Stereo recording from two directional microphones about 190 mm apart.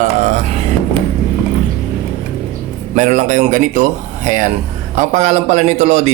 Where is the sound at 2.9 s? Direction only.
40° right (ahead or behind).